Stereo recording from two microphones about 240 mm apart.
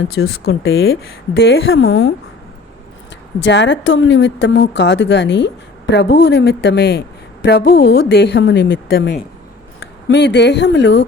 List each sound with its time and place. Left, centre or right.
0.1 s speech: left
0.6 s a woman's voice: left
3.4 s a woman's voice: left